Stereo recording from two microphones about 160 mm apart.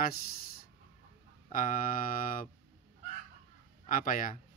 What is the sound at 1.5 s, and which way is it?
Speech, 60° left (ahead or behind).